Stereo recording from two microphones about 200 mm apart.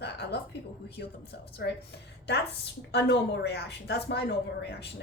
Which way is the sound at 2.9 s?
55° left (ahead or behind).